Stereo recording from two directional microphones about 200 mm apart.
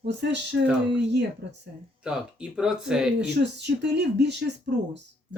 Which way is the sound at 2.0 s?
5° right (ahead or behind).